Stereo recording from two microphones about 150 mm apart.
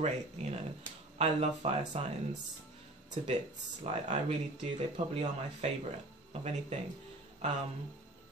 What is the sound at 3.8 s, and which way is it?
Speech, 50° right (ahead or behind).